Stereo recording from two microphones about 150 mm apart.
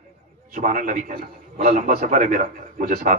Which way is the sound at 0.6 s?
60° right (ahead or behind).